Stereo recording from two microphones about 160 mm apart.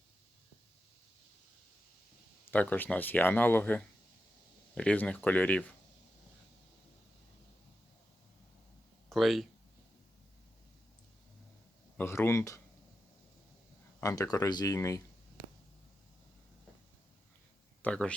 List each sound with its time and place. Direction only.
2.5 s speech: 10° left (ahead or behind)
9.0 s speech: centre (ahead or behind)
11.9 s speech: 15° left (ahead or behind)
14.0 s speech: 20° left (ahead or behind)
17.8 s speech: 5° left (ahead or behind)